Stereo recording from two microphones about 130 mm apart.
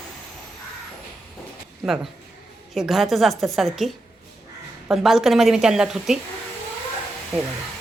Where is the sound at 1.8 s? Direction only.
5° right (ahead or behind).